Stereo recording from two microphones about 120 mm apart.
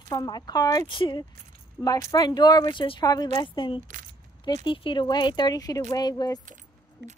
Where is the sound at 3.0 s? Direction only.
30° left (ahead or behind).